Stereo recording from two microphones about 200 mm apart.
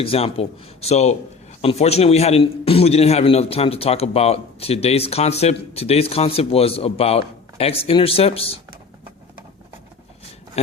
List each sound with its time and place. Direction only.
0.0 s a man's voice: 30° left (ahead or behind)